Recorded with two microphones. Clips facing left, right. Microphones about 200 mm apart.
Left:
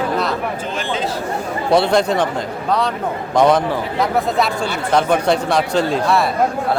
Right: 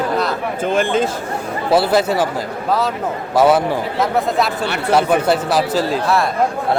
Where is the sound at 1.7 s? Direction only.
5° right (ahead or behind).